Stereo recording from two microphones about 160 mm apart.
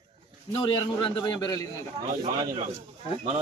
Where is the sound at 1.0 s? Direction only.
30° left (ahead or behind).